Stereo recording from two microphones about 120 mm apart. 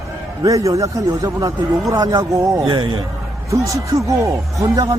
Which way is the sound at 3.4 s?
25° right (ahead or behind).